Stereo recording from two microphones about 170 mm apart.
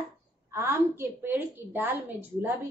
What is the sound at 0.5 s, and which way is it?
A woman's voice, 15° right (ahead or behind).